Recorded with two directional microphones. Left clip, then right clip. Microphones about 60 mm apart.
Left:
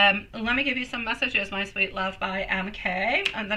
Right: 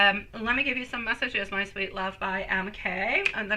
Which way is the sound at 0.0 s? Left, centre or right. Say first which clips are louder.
Left 2 dB; right.